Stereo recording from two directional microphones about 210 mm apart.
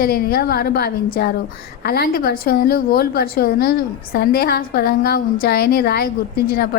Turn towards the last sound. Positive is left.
turn(degrees=45)  # may be behind; listen again after turning